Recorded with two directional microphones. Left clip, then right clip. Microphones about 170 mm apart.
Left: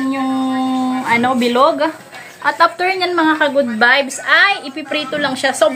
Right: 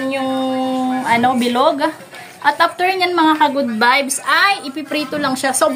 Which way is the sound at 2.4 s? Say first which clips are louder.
Left 1 dB; 85° right.